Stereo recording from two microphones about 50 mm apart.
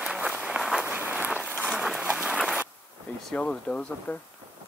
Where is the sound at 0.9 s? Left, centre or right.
Right.